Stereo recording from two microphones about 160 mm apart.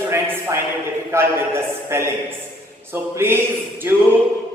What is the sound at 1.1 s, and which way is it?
Speech, 15° right (ahead or behind).